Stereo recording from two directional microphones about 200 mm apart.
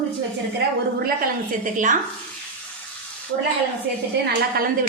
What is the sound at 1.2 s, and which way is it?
Speech, 40° right (ahead or behind).